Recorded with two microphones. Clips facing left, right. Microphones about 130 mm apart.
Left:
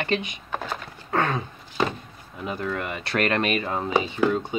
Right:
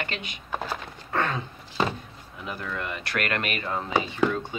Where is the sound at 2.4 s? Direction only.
15° left (ahead or behind).